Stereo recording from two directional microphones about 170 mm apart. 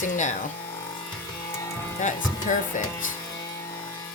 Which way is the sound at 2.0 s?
50° left (ahead or behind).